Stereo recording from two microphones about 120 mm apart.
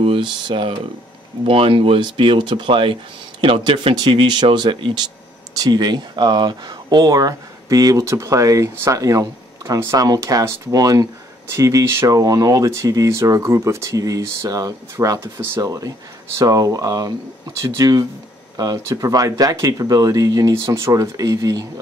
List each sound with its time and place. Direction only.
0.0 s speech: 45° right (ahead or behind)